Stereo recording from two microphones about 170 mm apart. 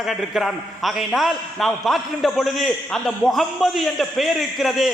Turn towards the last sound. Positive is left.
turn(degrees=0)  # may be behind; listen again after turning